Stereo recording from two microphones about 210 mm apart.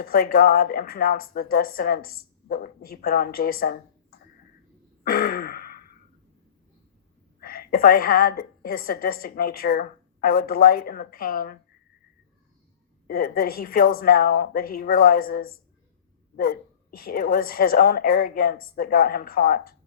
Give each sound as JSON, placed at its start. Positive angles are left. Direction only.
{"t": 0.0, "sound": "speech", "side_deg": 45}
{"t": 5.0, "sound": "gasp", "side_deg": 45}
{"t": 7.3, "sound": "speech", "side_deg": 45}
{"t": 13.1, "sound": "speech", "side_deg": 45}